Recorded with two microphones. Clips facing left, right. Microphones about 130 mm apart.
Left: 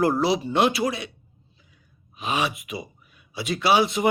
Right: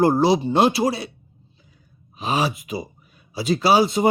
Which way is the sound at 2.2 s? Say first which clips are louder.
Right 3 dB; 35° right (ahead or behind).